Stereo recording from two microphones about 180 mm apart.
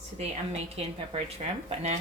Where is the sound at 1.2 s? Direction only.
35° right (ahead or behind).